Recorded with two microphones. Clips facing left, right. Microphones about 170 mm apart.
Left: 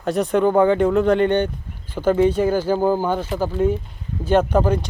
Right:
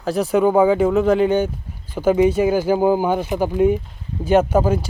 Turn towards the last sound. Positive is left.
turn(degrees=-5)  # may be behind; listen again after turning